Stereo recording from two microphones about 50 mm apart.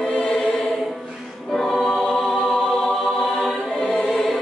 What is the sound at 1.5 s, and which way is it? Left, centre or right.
Music, centre.